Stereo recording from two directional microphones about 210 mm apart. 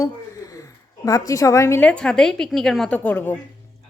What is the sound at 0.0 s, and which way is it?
A woman's voice, 15° left (ahead or behind).